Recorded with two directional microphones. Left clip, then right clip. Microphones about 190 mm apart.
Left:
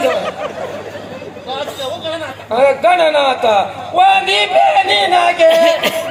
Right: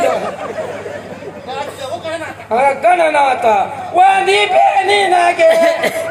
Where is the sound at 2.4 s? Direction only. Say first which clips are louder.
Even; 20° left (ahead or behind).